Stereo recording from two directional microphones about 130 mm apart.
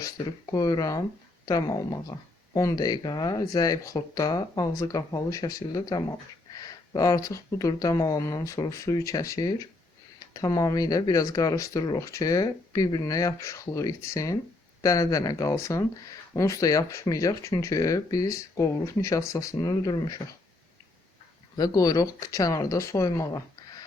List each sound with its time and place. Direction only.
0.5 s speech: 30° left (ahead or behind)
21.5 s speech: 30° left (ahead or behind)